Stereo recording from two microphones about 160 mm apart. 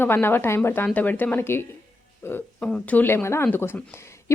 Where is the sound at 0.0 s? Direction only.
15° left (ahead or behind).